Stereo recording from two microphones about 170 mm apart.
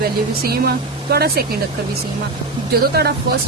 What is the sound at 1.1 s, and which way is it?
Speech, 65° right (ahead or behind).